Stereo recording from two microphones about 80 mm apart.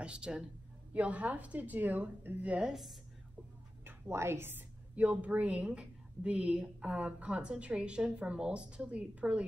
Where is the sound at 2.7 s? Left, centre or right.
Centre.